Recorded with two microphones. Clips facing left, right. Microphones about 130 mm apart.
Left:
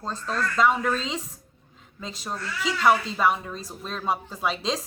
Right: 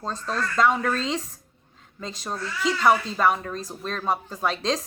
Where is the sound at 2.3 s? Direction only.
Centre (ahead or behind).